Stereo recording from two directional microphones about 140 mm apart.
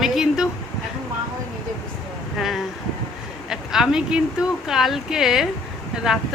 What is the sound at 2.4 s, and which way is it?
Speech, centre (ahead or behind).